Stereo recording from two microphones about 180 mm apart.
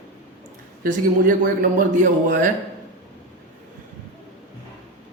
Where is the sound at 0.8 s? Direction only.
50° right (ahead or behind).